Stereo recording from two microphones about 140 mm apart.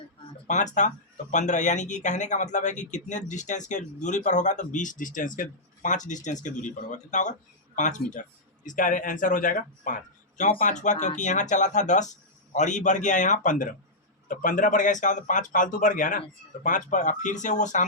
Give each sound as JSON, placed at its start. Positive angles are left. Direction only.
{"t": 0.4, "sound": "a man's voice", "side_deg": 60}